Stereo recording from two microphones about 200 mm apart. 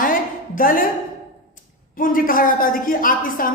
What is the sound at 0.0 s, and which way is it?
Music, 45° left (ahead or behind).